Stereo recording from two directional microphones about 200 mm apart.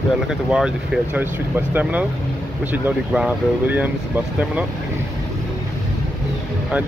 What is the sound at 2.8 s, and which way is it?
Speech, 5° right (ahead or behind).